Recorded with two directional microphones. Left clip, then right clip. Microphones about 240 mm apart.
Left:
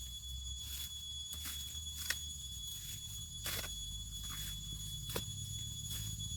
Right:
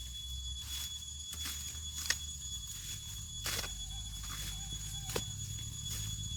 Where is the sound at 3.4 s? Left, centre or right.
Right.